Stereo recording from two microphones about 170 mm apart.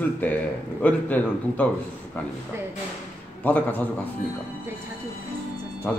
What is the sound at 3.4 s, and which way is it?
Speech, 10° left (ahead or behind).